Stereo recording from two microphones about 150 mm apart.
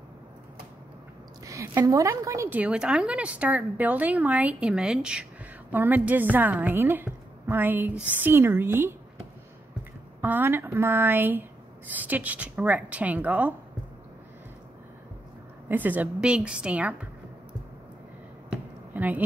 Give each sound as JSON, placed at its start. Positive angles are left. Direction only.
{"t": 1.4, "sound": "a woman's voice", "side_deg": -20}
{"t": 2.6, "sound": "speech", "side_deg": -5}
{"t": 10.2, "sound": "speech", "side_deg": -15}
{"t": 15.7, "sound": "speech", "side_deg": -10}
{"t": 18.5, "sound": "chop", "side_deg": -10}